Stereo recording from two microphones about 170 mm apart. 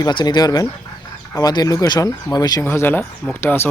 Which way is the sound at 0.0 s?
25° left (ahead or behind).